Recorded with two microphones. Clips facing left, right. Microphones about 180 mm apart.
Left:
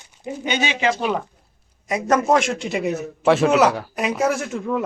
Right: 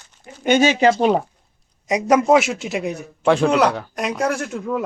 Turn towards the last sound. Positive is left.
turn(degrees=0)  # may be behind; listen again after turning